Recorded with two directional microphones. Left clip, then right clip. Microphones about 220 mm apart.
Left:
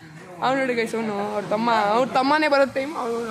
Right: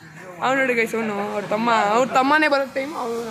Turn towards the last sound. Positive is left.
turn(degrees=5)  # may be behind; listen again after turning